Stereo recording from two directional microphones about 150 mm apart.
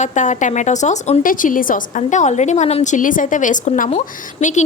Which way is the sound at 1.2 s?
65° left (ahead or behind).